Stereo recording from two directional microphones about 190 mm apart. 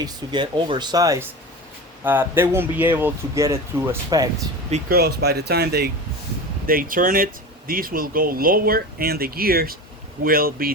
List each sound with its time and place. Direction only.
0.0 s speech: 25° right (ahead or behind)
4.9 s speech: 55° right (ahead or behind)